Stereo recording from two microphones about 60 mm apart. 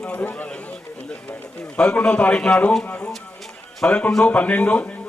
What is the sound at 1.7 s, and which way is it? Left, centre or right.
A man's voice, centre.